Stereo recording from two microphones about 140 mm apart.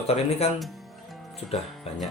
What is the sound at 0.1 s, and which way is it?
Speech, 45° left (ahead or behind).